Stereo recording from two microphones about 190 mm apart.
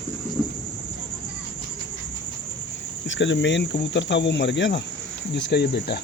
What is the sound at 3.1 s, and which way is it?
Cricket, 75° left (ahead or behind).